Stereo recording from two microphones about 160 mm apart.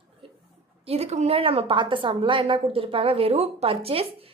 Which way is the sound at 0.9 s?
40° right (ahead or behind).